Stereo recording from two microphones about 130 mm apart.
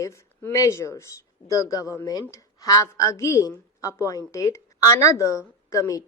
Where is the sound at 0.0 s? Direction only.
25° left (ahead or behind).